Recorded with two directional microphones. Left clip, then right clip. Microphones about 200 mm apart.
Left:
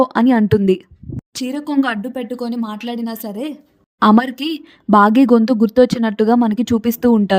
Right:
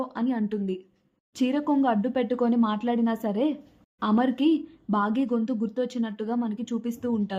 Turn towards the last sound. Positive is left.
turn(degrees=45)  # may be behind; listen again after turning